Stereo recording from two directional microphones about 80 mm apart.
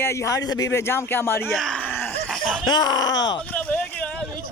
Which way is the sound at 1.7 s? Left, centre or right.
Left.